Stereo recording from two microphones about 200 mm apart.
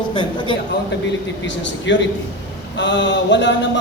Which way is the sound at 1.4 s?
65° left (ahead or behind).